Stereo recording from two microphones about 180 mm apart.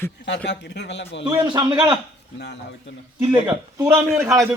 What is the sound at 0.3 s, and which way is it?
Speech, 75° left (ahead or behind).